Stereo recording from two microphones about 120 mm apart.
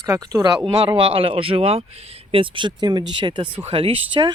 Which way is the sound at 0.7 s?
45° right (ahead or behind).